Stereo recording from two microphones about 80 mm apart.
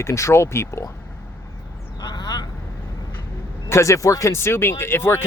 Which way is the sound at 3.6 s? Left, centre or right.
Left.